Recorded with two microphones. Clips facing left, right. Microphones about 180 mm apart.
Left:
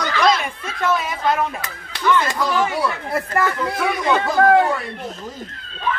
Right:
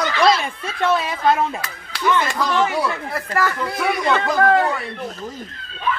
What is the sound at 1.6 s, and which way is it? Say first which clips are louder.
Speech: left 1 dB; 20° left (ahead or behind).